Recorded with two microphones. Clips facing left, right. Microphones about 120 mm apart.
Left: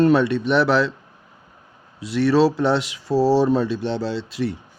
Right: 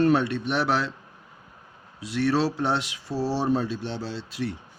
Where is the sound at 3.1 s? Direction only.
30° left (ahead or behind).